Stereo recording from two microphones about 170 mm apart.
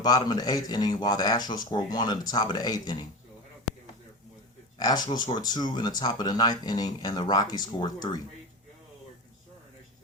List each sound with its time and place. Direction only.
0.0 s speech: 20° left (ahead or behind)
4.8 s speech: 25° left (ahead or behind)